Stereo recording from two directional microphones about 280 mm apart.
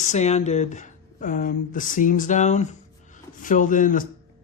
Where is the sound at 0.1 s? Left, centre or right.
Left.